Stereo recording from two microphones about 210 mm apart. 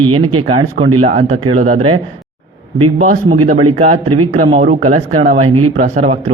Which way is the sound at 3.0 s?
40° right (ahead or behind).